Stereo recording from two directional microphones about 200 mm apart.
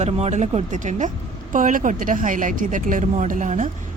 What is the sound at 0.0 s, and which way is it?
Speech, 35° right (ahead or behind).